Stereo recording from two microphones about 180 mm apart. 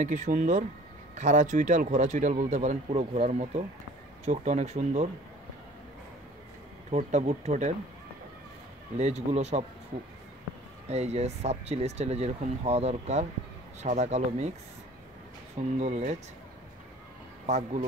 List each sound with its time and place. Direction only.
0.0 s speech: 45° right (ahead or behind)
6.9 s speech: 40° right (ahead or behind)
8.9 s speech: 40° right (ahead or behind)
10.9 s speech: 35° right (ahead or behind)
15.8 s speech: 40° right (ahead or behind)
17.5 s speech: 40° right (ahead or behind)